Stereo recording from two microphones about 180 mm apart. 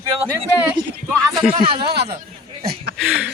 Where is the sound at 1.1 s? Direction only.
5° left (ahead or behind).